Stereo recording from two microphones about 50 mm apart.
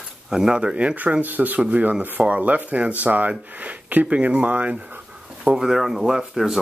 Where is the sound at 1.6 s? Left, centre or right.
Right.